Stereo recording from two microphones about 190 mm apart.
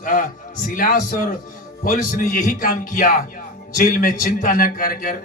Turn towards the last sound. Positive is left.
turn(degrees=45)  # may be behind; listen again after turning